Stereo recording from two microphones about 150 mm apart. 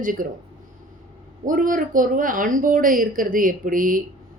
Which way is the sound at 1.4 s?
65° right (ahead or behind).